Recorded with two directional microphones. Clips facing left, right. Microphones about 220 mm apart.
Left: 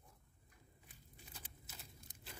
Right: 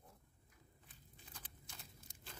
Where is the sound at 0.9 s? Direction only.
10° left (ahead or behind).